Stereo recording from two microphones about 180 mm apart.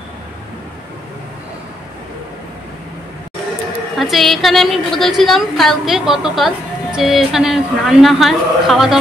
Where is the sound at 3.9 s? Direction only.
Centre (ahead or behind).